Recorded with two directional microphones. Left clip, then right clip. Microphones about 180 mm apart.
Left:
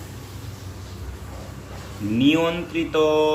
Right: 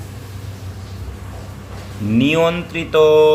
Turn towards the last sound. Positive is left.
turn(degrees=-40)  # may be behind; listen again after turning